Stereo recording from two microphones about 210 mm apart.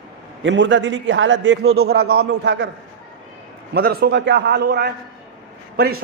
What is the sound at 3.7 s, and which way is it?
Speech, 50° right (ahead or behind).